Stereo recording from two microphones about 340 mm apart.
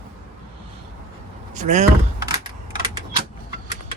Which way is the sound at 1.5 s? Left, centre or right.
Right.